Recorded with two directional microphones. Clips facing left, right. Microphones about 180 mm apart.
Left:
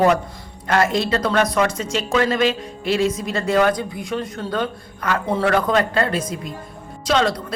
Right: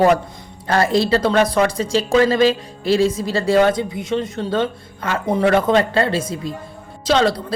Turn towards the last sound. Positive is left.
turn(degrees=-30)  # may be behind; listen again after turning